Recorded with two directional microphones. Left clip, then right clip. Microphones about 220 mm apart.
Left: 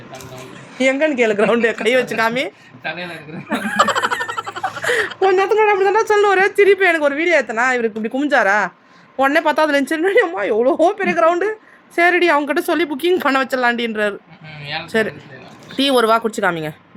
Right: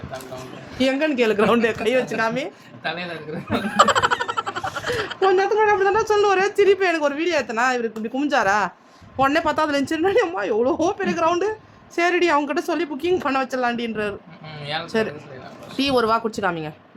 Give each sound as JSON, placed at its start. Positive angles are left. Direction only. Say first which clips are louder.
{"t": 0.8, "sound": "speech", "louder": "left 5 dB", "side_deg": 0}
{"t": 1.8, "sound": "speech", "louder": "left 5 dB", "side_deg": 15}
{"t": 3.8, "sound": "frog", "louder": "even", "side_deg": 0}
{"t": 5.3, "sound": "a woman's voice", "louder": "left 3 dB", "side_deg": 15}
{"t": 7.8, "sound": "speech", "louder": "left 6 dB", "side_deg": 20}
{"t": 8.2, "sound": "a woman's voice", "louder": "left 4 dB", "side_deg": 10}